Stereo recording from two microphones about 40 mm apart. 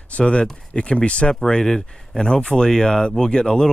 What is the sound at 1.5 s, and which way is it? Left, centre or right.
A man's voice, centre.